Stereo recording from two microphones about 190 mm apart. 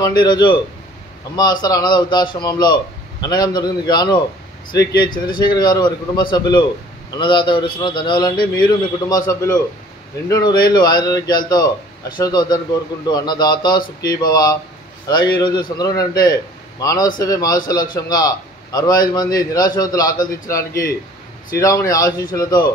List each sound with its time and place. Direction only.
0.0 s a man's voice: 25° left (ahead or behind)